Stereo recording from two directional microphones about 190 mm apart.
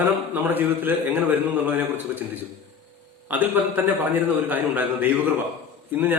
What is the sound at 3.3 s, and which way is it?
A man's voice, 10° right (ahead or behind).